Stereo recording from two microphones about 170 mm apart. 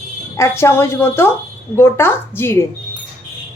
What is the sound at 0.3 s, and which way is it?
A woman's voice, 15° left (ahead or behind).